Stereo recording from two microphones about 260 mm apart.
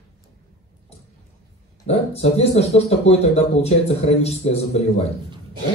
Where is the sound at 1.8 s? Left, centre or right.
Left.